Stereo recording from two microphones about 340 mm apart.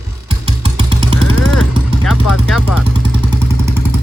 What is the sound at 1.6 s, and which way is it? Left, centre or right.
Vehicle, centre.